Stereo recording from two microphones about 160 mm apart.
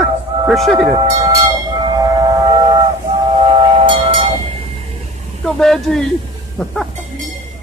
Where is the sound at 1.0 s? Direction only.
30° right (ahead or behind).